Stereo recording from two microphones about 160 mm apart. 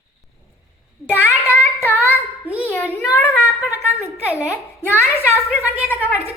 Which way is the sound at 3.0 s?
20° left (ahead or behind).